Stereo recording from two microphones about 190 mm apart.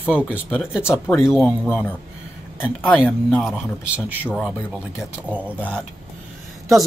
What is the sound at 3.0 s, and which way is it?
Speech, 5° left (ahead or behind).